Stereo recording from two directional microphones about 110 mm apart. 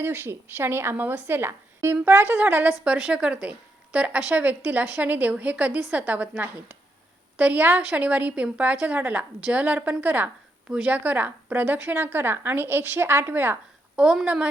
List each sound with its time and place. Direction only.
0.0 s a woman's voice: 20° right (ahead or behind)
14.0 s a woman's voice: 5° right (ahead or behind)